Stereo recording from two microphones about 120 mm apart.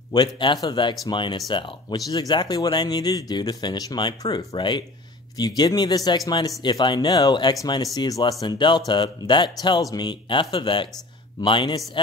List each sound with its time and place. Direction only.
0.1 s speech: 40° left (ahead or behind)